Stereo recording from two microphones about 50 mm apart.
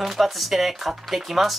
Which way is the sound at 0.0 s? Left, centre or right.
Centre.